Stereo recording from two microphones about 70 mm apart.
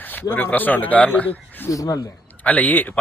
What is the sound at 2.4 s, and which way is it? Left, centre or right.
Speech, left.